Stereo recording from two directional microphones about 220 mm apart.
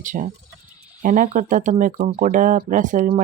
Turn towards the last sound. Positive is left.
turn(degrees=-35)  # may be behind; listen again after turning